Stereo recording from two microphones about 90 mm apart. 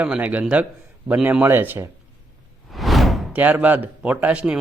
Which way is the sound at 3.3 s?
20° right (ahead or behind).